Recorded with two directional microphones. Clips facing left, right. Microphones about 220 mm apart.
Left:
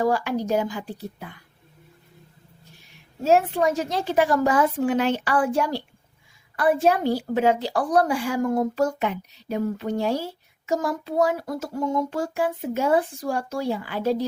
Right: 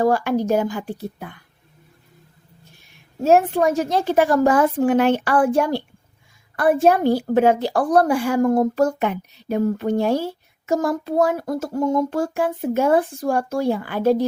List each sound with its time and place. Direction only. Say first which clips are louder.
0.0 s a woman's voice: right 4 dB; 50° right (ahead or behind)
3.2 s a woman's voice: right 4 dB; 50° right (ahead or behind)